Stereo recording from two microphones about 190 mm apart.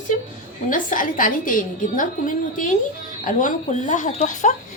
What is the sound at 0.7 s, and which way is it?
Speech, 45° left (ahead or behind).